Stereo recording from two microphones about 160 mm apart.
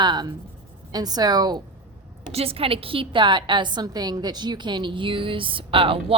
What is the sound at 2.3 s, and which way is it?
A woman's voice, 35° right (ahead or behind).